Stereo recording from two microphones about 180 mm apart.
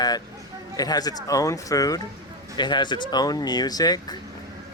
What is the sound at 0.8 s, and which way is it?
Speech, 20° left (ahead or behind).